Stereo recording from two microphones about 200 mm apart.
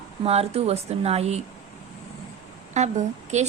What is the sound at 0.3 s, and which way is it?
A woman's voice, 30° right (ahead or behind).